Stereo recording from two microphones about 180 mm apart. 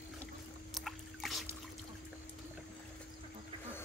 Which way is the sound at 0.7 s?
Centre (ahead or behind).